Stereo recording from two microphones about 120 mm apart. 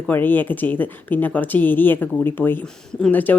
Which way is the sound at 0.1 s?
15° left (ahead or behind).